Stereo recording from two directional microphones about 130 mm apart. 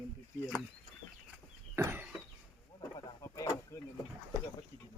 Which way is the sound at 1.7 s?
20° right (ahead or behind).